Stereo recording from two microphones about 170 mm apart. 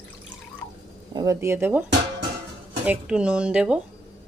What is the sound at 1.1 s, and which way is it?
Speech, 20° right (ahead or behind).